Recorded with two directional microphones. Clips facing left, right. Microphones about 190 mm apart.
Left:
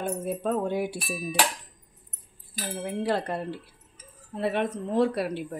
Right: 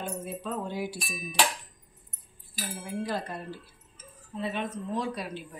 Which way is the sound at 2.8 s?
65° left (ahead or behind).